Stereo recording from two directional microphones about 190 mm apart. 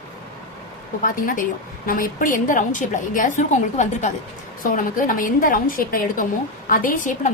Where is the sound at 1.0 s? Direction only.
45° left (ahead or behind).